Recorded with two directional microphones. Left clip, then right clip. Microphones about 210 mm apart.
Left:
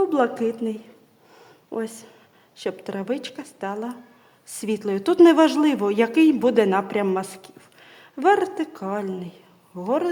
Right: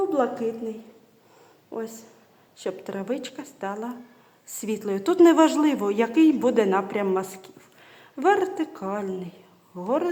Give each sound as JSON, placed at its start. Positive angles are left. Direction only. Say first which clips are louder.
{"t": 0.1, "sound": "a woman's voice", "louder": "left 3 dB", "side_deg": 40}
{"t": 2.6, "sound": "speech", "louder": "left 2 dB", "side_deg": 25}